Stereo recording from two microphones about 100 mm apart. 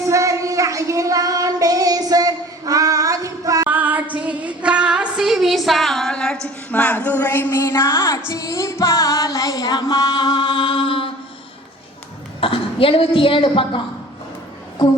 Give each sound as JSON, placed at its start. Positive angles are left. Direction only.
{"t": 0.1, "sound": "female singing", "side_deg": -30}
{"t": 3.7, "sound": "female singing", "side_deg": -15}
{"t": 6.7, "sound": "speech", "side_deg": 15}
{"t": 8.3, "sound": "music", "side_deg": 30}
{"t": 12.4, "sound": "a woman's voice", "side_deg": 65}